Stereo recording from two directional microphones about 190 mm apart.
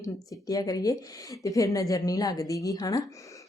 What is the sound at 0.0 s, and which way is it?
Speech, 20° left (ahead or behind).